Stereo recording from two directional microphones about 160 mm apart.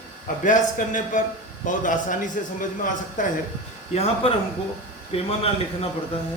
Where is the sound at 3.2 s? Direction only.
55° left (ahead or behind).